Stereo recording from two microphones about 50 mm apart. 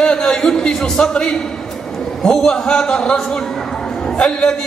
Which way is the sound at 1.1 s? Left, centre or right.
Left.